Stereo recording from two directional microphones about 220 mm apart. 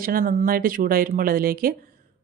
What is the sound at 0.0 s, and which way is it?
Speech, 40° right (ahead or behind).